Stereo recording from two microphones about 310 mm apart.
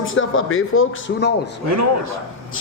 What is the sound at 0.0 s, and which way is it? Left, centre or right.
A man's voice, left.